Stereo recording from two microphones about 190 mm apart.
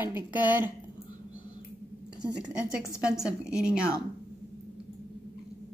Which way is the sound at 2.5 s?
5° right (ahead or behind).